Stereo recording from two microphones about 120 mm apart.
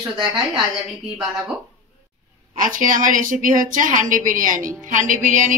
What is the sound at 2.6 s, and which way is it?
A woman's voice, 90° right.